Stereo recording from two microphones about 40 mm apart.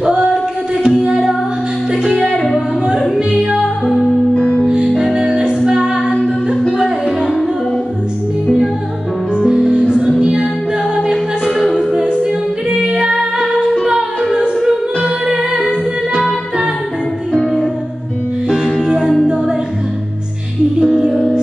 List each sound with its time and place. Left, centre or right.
0.0 s music: right
4.4 s music: left
4.6 s music: centre
9.5 s music: right
11.1 s music: centre
15.0 s music: centre
18.5 s music: centre
20.8 s music: centre